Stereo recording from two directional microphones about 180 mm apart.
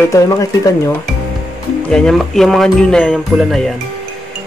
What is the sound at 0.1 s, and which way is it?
Speech, 20° left (ahead or behind).